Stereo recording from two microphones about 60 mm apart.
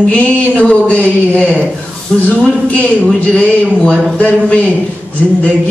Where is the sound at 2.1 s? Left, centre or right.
Centre.